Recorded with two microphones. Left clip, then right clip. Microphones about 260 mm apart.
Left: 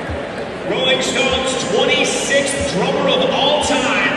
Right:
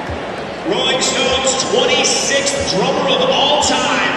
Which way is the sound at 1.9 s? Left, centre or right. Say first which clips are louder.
Right 1 dB; right.